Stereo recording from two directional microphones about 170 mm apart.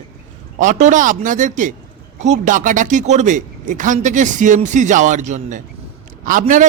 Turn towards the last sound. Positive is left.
turn(degrees=-50)  # may be behind; listen again after turning